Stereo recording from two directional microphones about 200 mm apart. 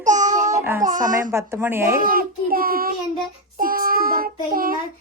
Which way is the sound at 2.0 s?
45° right (ahead or behind).